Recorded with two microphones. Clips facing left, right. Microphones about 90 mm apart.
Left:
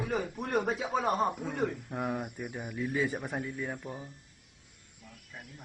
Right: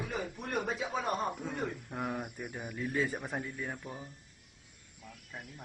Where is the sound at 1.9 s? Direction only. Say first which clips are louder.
Left 3 dB; 5° left (ahead or behind).